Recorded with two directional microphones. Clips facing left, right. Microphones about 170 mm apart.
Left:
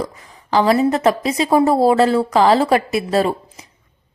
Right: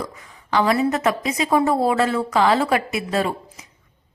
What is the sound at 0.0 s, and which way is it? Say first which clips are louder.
A woman's voice: left 5 dB; 35° left (ahead or behind).